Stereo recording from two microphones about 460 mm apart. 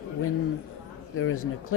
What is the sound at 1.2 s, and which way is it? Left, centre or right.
Speech, left.